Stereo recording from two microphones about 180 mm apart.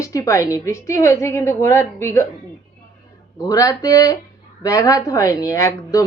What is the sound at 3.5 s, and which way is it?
Speech, 20° left (ahead or behind).